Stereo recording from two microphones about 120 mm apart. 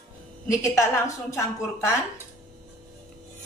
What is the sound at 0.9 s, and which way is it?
A woman's voice, 25° left (ahead or behind).